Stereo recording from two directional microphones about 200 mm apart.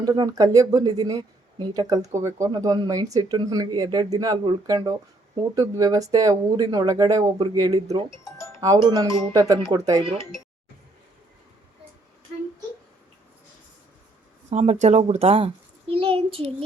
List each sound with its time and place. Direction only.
0.0 s speech: 20° right (ahead or behind)
14.5 s speech: 35° right (ahead or behind)